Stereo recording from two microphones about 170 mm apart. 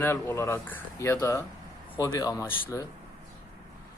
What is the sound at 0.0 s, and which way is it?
Speech, 15° left (ahead or behind).